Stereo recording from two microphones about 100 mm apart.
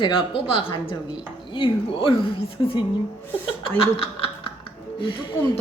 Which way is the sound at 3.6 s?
65° left (ahead or behind).